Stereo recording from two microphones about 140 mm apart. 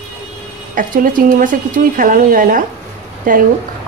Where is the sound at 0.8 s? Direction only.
75° right (ahead or behind).